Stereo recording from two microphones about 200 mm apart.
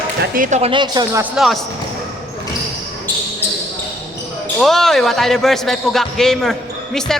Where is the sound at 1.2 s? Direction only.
Centre (ahead or behind).